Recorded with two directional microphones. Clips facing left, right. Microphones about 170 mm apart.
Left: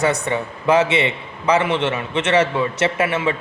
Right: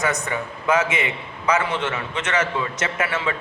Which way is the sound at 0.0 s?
30° left (ahead or behind).